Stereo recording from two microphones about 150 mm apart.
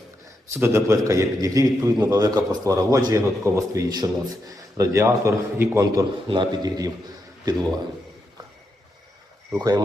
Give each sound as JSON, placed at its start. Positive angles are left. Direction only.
{"t": 0.5, "sound": "a man's voice", "side_deg": -15}
{"t": 9.5, "sound": "a man's voice", "side_deg": -25}